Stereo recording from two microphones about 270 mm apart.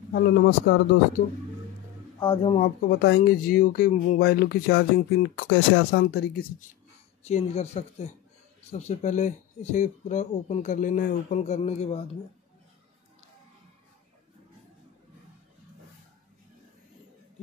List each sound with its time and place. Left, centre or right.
0.1 s speech: left
2.1 s speech: centre; by 6.4 s left
7.2 s speech: left